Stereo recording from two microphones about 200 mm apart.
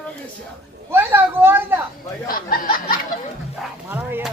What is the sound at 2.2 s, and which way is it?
Snicker, 45° left (ahead or behind).